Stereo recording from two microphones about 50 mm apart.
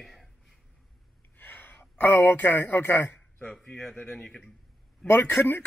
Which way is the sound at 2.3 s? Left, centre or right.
Left.